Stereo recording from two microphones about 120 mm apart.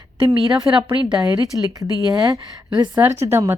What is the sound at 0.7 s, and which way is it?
Speech, 40° right (ahead or behind).